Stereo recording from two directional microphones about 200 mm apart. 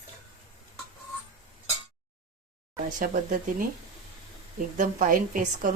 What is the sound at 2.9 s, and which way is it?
Speech, 40° right (ahead or behind).